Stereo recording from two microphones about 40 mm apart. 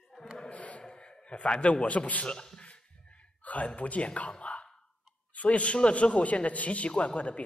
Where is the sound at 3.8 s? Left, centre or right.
Left.